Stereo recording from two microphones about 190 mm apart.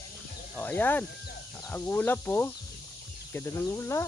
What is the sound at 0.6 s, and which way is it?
Speech, 10° left (ahead or behind).